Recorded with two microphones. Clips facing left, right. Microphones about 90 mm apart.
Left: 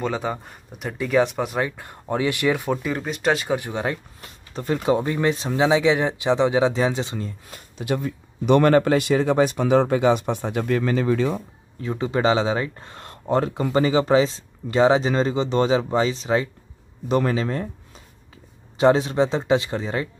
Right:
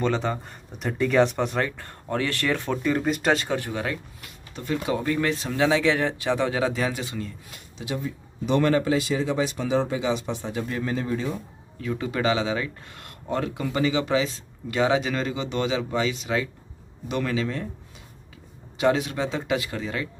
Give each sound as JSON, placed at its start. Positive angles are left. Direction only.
{"t": 0.0, "sound": "speech", "side_deg": 10}
{"t": 3.4, "sound": "speech", "side_deg": 20}
{"t": 3.8, "sound": "speech", "side_deg": 30}
{"t": 7.5, "sound": "speech", "side_deg": 50}
{"t": 11.8, "sound": "speech", "side_deg": 30}
{"t": 18.8, "sound": "speech", "side_deg": 30}